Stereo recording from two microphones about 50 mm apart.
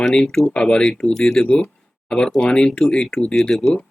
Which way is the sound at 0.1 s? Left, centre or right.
Centre.